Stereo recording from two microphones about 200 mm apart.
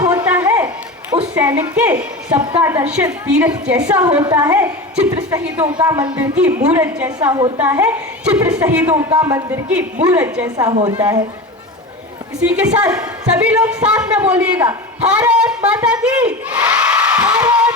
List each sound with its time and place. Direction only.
0.0 s a sound: 10° right (ahead or behind)
1.2 s a woman's voice: 5° right (ahead or behind)
2.0 s a woman's voice: 20° right (ahead or behind)
2.6 s a woman's voice: 10° right (ahead or behind)
7.3 s a woman's voice: 20° right (ahead or behind)
7.6 s a woman's voice: 10° right (ahead or behind)
9.6 s a woman's voice: 5° right (ahead or behind)
10.9 s a woman's voice: 10° right (ahead or behind)
12.4 s a woman's voice: 5° right (ahead or behind)